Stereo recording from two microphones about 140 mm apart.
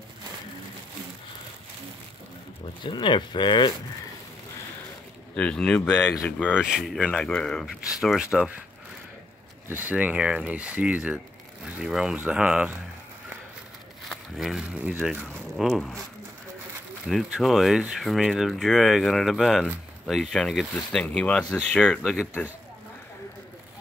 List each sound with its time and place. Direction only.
2.8 s speech: 35° left (ahead or behind)
5.3 s speech: 10° left (ahead or behind)
9.7 s speech: 10° right (ahead or behind)
14.0 s speech: centre (ahead or behind)
15.5 s speech: centre (ahead or behind)
17.0 s speech: centre (ahead or behind)